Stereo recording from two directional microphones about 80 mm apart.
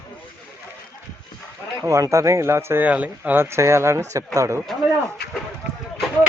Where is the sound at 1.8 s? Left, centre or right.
Right.